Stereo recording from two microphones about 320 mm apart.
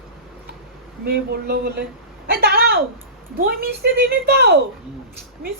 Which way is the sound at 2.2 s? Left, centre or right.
Right.